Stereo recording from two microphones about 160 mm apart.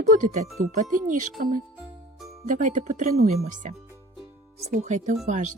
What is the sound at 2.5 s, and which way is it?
Speech, 55° right (ahead or behind).